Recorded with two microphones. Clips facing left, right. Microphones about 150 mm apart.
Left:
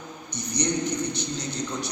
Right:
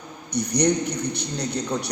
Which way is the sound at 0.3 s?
60° right (ahead or behind).